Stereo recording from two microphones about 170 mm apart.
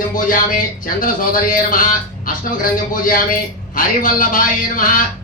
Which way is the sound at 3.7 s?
55° left (ahead or behind).